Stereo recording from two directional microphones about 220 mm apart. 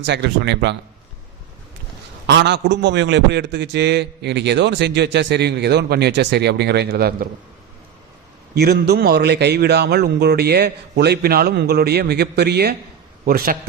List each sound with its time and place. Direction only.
0.0 s a man's voice: 50° right (ahead or behind)
2.2 s a man's voice: 50° right (ahead or behind)
8.5 s a man's voice: 45° right (ahead or behind)